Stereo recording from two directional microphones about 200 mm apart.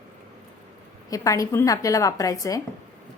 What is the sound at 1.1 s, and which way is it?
A woman's voice, 15° left (ahead or behind).